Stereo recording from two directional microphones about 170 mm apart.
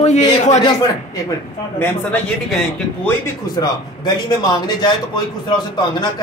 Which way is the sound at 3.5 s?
25° left (ahead or behind).